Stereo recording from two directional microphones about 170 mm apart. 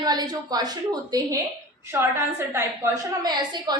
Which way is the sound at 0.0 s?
25° right (ahead or behind).